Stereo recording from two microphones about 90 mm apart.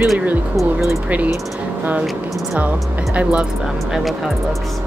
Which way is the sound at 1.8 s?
15° right (ahead or behind).